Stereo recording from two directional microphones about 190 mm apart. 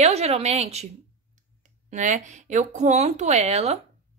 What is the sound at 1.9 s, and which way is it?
Speech, 40° right (ahead or behind).